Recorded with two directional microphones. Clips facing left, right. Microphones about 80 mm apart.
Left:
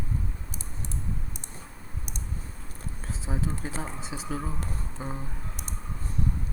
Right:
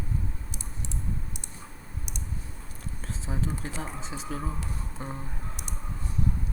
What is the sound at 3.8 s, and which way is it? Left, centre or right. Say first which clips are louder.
Speech: even; centre.